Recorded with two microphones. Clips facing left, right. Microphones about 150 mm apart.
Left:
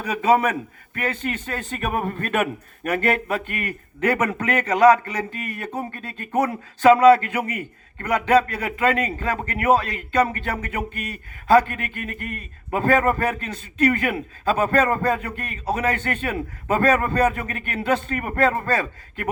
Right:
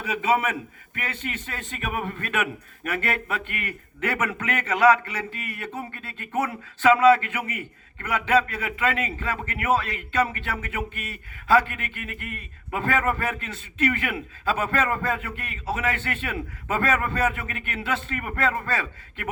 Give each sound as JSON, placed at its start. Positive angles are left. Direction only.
{"t": 0.0, "sound": "a man's voice", "side_deg": 40}